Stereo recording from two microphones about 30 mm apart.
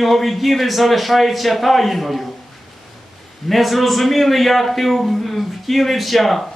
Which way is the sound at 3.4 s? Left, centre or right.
Centre.